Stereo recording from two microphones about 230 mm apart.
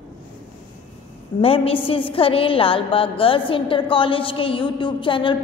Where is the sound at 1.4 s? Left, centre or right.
Left.